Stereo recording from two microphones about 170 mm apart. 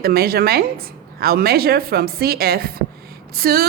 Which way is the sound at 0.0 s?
65° right (ahead or behind).